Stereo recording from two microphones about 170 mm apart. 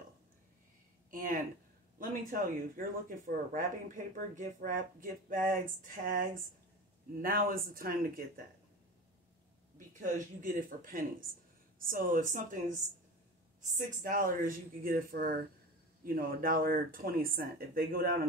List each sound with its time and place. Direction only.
1.1 s a sound: 55° right (ahead or behind)
2.0 s speech: 55° right (ahead or behind)
9.8 s speech: 50° right (ahead or behind)